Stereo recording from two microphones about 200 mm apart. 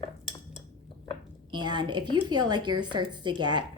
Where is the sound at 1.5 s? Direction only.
20° right (ahead or behind).